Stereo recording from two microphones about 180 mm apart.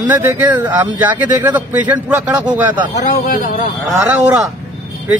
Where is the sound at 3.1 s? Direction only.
50° left (ahead or behind).